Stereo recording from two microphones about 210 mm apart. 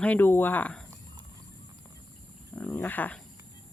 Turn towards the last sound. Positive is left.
turn(degrees=5)  # may be behind; listen again after turning